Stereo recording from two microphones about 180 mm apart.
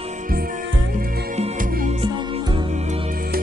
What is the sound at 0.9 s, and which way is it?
Music, 45° right (ahead or behind).